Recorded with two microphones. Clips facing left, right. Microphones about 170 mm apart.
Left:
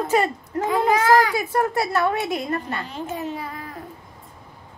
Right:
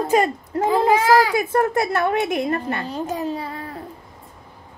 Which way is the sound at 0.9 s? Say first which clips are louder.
Even; 20° right (ahead or behind).